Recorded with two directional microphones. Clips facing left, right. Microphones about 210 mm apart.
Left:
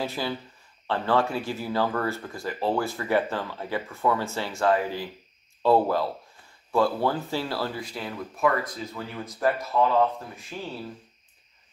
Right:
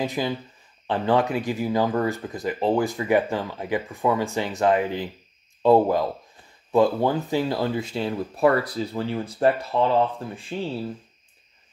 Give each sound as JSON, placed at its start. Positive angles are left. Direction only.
{"t": 0.0, "sound": "speech", "side_deg": -15}